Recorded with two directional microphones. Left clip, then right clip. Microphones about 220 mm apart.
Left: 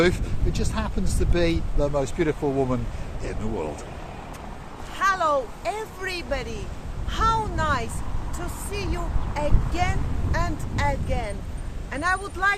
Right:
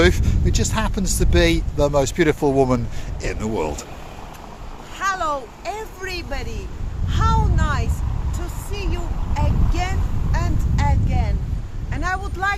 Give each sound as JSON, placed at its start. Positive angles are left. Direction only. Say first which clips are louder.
{"t": 0.0, "sound": "speech", "louder": "right 4 dB", "side_deg": -35}
{"t": 4.9, "sound": "speech", "louder": "left 1 dB", "side_deg": 0}